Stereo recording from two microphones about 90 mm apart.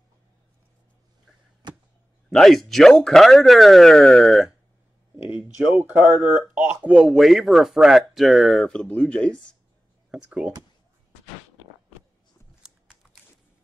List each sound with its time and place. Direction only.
2.2 s a man's voice: 5° left (ahead or behind)
6.0 s a man's voice: 5° right (ahead or behind)
6.4 s speech: 20° right (ahead or behind)
6.9 s a man's voice: centre (ahead or behind)
10.1 s speech: 5° right (ahead or behind)